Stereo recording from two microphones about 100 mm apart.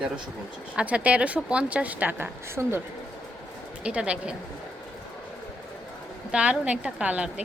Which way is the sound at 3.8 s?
10° right (ahead or behind).